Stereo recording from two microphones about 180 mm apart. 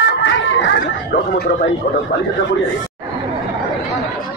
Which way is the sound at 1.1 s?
55° left (ahead or behind).